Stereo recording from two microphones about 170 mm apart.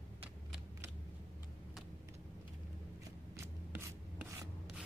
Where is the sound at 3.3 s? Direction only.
15° right (ahead or behind).